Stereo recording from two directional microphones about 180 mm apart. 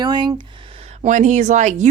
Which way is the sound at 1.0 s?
45° right (ahead or behind).